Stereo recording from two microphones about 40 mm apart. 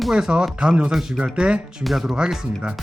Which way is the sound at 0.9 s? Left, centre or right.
Centre.